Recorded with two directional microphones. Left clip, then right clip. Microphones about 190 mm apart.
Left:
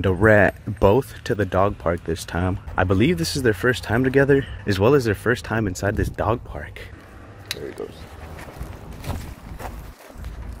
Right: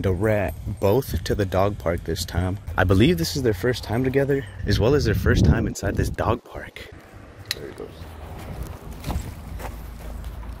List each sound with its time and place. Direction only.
0.0 s speech: 15° left (ahead or behind)
2.7 s speech: 5° right (ahead or behind)
3.2 s speech: 10° left (ahead or behind)
5.9 s speech: centre (ahead or behind)